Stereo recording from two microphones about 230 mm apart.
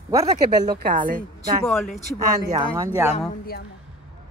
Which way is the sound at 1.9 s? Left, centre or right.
Left.